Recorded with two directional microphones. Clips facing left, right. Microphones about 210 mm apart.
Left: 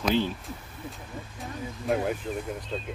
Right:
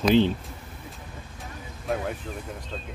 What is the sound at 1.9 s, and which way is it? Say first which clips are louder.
Speech: left 2 dB; centre (ahead or behind).